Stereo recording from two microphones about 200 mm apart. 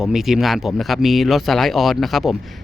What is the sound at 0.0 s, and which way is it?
Speech, centre (ahead or behind).